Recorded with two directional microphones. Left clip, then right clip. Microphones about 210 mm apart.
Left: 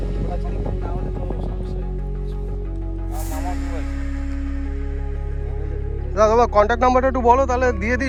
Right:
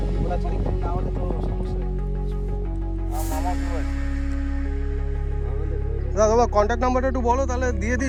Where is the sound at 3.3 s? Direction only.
15° right (ahead or behind).